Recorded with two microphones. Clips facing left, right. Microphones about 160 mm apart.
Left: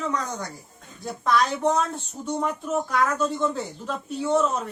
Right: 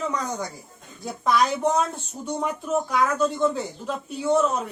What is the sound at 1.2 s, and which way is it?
Speech, 5° right (ahead or behind).